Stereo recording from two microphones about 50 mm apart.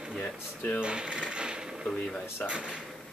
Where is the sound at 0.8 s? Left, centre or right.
Centre.